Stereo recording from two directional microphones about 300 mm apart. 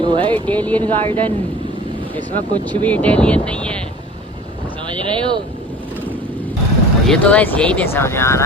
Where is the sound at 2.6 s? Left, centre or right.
Centre.